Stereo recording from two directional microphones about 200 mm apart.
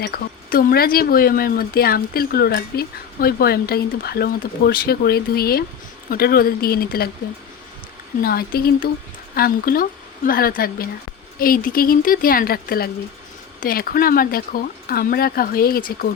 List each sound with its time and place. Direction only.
0.0 s speech: 50° left (ahead or behind)
8.2 s speech: 50° left (ahead or behind)